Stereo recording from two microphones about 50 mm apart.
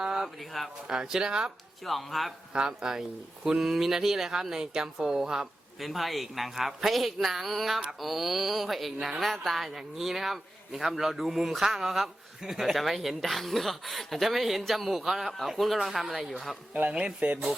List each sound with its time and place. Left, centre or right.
0.0 s a sound: centre
0.5 s speech: centre
0.9 s speech: centre
1.8 s speech: centre
2.5 s speech: centre
5.8 s speech: centre
17.2 s speech: right